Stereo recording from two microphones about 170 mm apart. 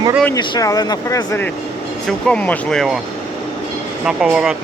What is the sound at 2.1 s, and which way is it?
Speech, 5° left (ahead or behind).